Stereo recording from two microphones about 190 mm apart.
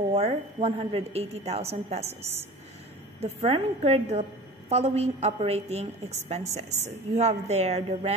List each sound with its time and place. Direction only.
0.1 s a woman's voice: 30° right (ahead or behind)